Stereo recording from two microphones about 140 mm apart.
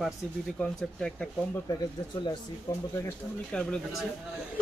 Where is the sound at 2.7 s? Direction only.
25° left (ahead or behind).